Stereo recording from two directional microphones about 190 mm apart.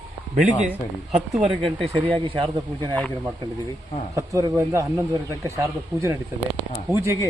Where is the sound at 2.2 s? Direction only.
25° right (ahead or behind).